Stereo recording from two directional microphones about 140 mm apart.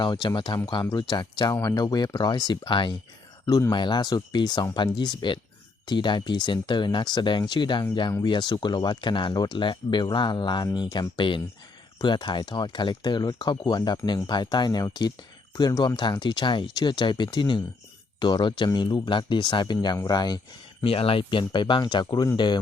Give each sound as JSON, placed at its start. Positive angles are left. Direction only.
{"t": 0.0, "sound": "speech", "side_deg": 35}
{"t": 20.8, "sound": "speech", "side_deg": 40}